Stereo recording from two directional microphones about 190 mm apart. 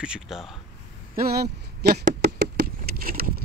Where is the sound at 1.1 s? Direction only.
55° right (ahead or behind).